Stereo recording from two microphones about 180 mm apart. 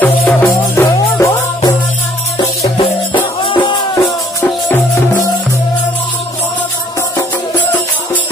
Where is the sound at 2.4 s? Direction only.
30° left (ahead or behind).